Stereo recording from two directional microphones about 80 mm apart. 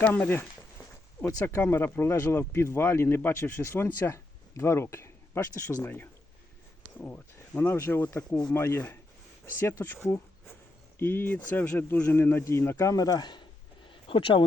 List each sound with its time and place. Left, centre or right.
0.0 s speech: left
1.5 s speech: left
10.9 s speech: left
13.8 s a sound: left